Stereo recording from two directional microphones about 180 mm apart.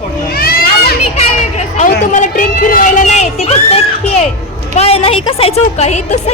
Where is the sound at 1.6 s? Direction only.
40° left (ahead or behind).